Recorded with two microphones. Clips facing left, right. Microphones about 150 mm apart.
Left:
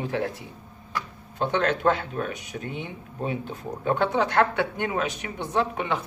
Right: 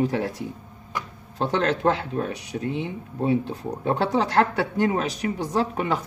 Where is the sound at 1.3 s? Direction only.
35° right (ahead or behind).